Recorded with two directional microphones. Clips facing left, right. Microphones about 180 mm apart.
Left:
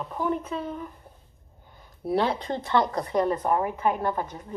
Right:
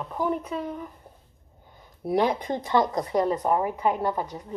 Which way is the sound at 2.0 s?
15° right (ahead or behind).